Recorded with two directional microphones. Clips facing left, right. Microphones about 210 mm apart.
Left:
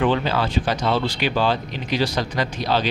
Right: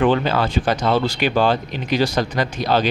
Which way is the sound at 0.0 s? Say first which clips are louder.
Right 3 dB; 50° right (ahead or behind).